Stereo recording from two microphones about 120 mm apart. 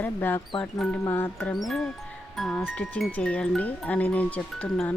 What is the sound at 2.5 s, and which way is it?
Speech, 15° left (ahead or behind).